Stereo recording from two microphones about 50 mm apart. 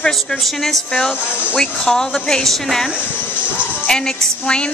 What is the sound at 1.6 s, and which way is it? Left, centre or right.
Speech, centre.